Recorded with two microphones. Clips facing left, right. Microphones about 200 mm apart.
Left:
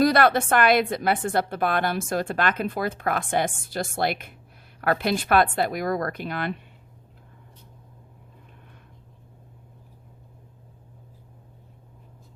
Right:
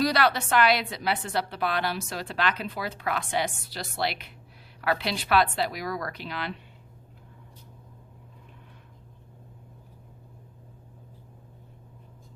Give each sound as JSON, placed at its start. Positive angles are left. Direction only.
{"t": 0.0, "sound": "a woman's voice", "side_deg": 50}